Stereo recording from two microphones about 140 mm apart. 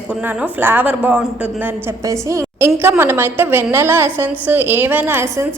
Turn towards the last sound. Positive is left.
turn(degrees=-20)  # may be behind; listen again after turning